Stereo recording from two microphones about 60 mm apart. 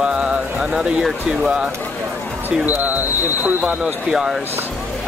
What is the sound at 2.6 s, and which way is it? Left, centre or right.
Speech, right.